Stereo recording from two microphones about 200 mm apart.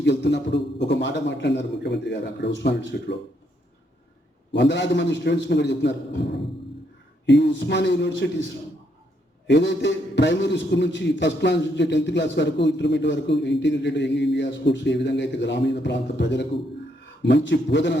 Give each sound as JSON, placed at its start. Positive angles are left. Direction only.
{"t": 0.0, "sound": "a man's voice", "side_deg": 60}
{"t": 4.5, "sound": "a man's voice", "side_deg": 60}
{"t": 9.5, "sound": "a man's voice", "side_deg": 60}